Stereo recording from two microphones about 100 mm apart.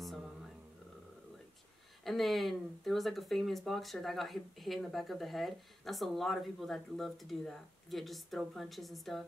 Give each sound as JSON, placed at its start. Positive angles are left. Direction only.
{"t": 2.0, "sound": "speech", "side_deg": 0}